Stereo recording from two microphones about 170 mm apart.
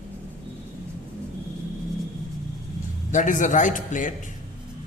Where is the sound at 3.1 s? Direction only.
50° left (ahead or behind).